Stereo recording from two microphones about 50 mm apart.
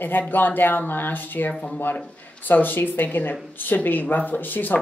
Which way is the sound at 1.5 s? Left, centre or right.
Centre.